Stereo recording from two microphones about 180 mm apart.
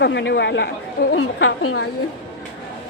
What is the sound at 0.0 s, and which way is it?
Speech, 75° left (ahead or behind).